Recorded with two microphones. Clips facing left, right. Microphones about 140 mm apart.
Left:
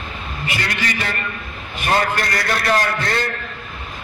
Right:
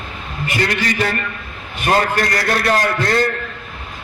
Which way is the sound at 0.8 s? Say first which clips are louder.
Right 5 dB; 45° right (ahead or behind).